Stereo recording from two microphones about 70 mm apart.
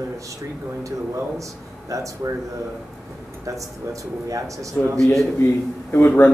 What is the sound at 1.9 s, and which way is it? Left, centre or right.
Speech, right.